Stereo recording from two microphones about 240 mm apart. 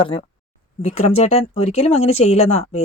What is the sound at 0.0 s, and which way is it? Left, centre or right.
Speech, left.